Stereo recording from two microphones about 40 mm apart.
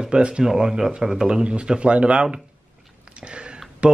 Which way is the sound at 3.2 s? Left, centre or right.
Right.